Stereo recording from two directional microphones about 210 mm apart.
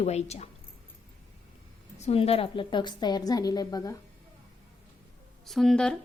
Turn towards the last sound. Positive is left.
turn(degrees=5)  # may be behind; listen again after turning